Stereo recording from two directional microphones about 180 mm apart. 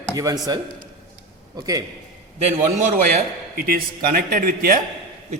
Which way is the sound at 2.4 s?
35° right (ahead or behind).